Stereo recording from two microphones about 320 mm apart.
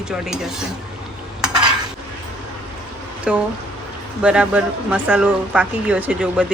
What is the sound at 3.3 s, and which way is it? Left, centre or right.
Speech, centre.